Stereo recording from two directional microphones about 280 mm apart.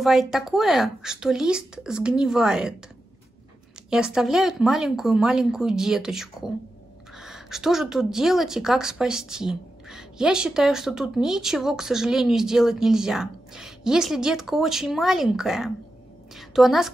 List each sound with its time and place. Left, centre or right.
0.0 s a woman's voice: centre
3.9 s a woman's voice: centre